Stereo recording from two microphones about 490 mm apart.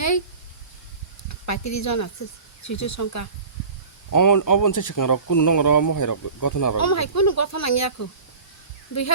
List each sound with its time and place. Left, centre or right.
1.3 s speech: left